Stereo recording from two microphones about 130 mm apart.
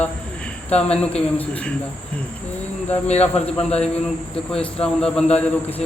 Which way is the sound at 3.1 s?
55° left (ahead or behind).